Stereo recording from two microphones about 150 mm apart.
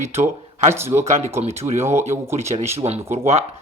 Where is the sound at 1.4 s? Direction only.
45° right (ahead or behind).